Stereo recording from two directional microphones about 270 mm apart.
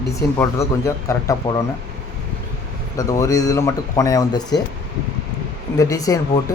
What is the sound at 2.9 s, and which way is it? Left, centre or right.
A man's voice, centre.